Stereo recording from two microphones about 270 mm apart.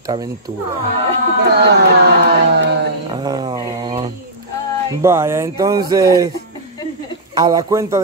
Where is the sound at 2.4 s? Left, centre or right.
Right.